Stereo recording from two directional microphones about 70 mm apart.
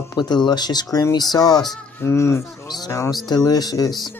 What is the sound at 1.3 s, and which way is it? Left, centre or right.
Speech, left.